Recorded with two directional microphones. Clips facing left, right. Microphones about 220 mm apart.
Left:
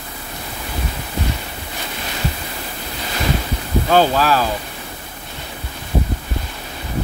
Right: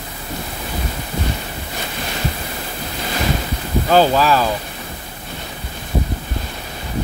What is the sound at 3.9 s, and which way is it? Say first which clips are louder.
Speech: right 1 dB; centre (ahead or behind).